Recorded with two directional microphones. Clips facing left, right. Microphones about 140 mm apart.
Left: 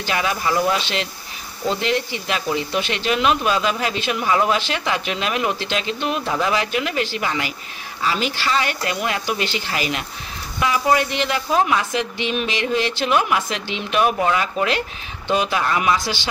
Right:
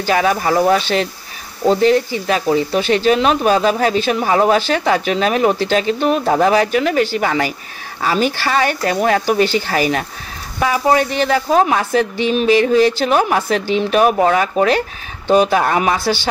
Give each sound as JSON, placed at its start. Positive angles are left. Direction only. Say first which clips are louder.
{"t": 0.0, "sound": "speech", "louder": "right 7 dB", "side_deg": -40}